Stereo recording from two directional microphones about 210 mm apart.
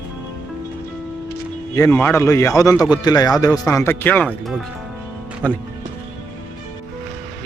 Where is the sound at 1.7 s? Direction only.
15° left (ahead or behind).